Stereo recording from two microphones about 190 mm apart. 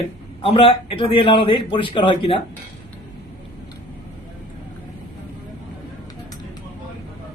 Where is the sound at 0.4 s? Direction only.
30° left (ahead or behind).